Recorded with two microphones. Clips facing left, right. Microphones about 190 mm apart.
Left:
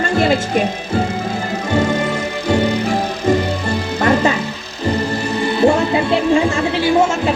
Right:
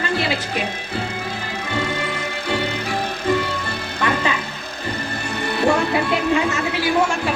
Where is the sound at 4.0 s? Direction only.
45° left (ahead or behind).